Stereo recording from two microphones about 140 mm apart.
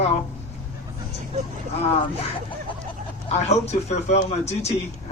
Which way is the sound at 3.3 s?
50° left (ahead or behind).